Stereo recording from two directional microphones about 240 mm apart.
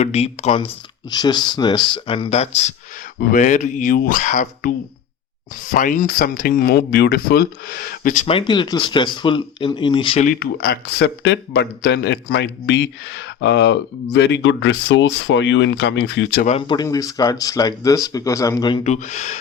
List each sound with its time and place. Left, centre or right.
0.0 s speech: left
5.7 s speech: left
16.5 s speech: left